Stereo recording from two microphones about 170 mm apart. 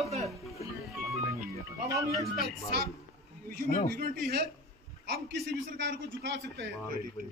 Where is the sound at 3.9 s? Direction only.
60° right (ahead or behind).